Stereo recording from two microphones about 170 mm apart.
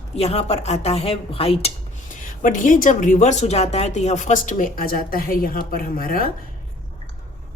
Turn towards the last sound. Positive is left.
turn(degrees=55)  # may be behind; listen again after turning